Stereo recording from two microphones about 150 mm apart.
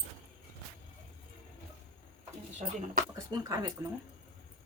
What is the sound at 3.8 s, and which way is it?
Speech, 20° right (ahead or behind).